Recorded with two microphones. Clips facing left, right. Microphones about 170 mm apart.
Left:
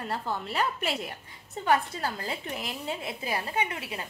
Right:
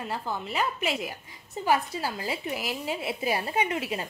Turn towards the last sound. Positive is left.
turn(degrees=-20)  # may be behind; listen again after turning